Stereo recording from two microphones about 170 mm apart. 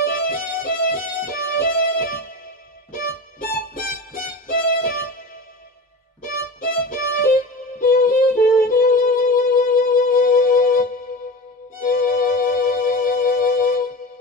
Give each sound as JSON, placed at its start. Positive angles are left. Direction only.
{"t": 0.0, "sound": "violin", "side_deg": 55}
{"t": 1.2, "sound": "music", "side_deg": 60}
{"t": 6.2, "sound": "music", "side_deg": 55}